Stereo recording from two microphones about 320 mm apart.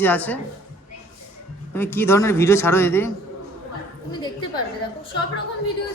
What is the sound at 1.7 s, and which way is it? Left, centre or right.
A man's voice, centre.